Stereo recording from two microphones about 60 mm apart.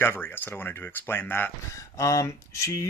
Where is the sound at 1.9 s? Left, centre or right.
Left.